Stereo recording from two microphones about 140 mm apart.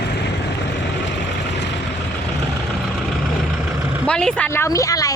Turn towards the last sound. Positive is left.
turn(degrees=25)  # may be behind; listen again after turning